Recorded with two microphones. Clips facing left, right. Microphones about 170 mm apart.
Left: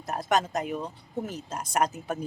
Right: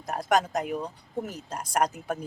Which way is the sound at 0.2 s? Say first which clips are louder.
Right 2 dB; 10° right (ahead or behind).